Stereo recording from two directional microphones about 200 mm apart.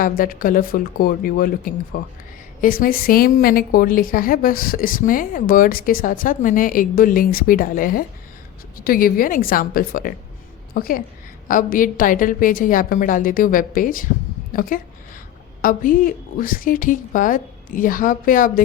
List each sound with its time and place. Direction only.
0.0 s a woman's voice: 45° left (ahead or behind)